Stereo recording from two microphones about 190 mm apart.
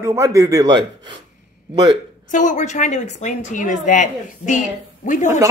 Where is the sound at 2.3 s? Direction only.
40° left (ahead or behind).